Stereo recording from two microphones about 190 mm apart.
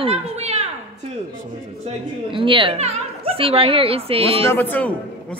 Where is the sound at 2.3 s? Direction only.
25° right (ahead or behind).